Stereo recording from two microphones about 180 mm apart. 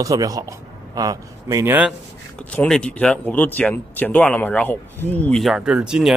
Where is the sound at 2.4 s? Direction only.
5° left (ahead or behind).